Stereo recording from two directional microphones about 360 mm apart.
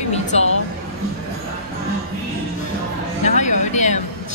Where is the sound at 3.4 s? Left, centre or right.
Centre.